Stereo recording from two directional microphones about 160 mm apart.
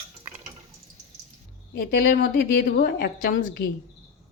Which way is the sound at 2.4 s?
70° left (ahead or behind).